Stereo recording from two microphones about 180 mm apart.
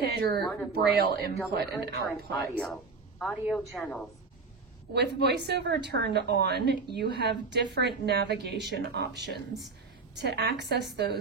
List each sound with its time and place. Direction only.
0.0 s speech: 60° right (ahead or behind)
0.4 s speech: centre (ahead or behind)
0.9 s speech: 60° right (ahead or behind)
2.6 s a woman's voice: centre (ahead or behind)
4.9 s a woman's voice: 70° right (ahead or behind)
9.2 s speech: centre (ahead or behind)
10.1 s a woman's voice: 70° right (ahead or behind)